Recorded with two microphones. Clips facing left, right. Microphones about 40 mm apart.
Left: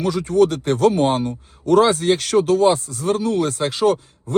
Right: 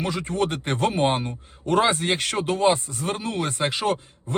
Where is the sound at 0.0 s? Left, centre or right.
Right.